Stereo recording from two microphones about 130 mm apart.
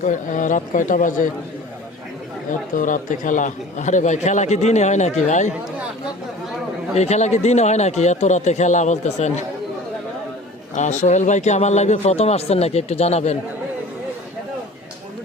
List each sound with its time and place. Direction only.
0.0 s a man's voice: 85° left
2.7 s speech: 90° left; by 5.5 s 65° left (ahead or behind)
6.9 s speech: 55° left (ahead or behind)
10.8 s speech: 65° left (ahead or behind)